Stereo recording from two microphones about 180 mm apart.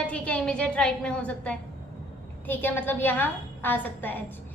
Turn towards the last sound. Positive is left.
turn(degrees=10)  # may be behind; listen again after turning